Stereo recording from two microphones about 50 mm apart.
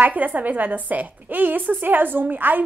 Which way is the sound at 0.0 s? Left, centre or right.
Right.